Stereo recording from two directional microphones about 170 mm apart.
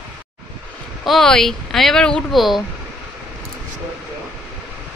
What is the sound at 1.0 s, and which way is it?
A woman's voice, 5° left (ahead or behind).